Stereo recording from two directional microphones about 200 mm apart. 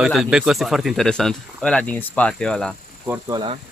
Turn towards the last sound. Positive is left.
turn(degrees=-20)  # may be behind; listen again after turning